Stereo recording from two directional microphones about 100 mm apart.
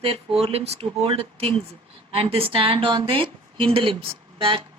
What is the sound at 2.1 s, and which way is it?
A woman's voice, 70° right (ahead or behind).